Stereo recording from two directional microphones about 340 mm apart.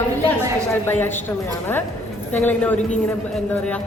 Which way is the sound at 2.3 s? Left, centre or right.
Centre.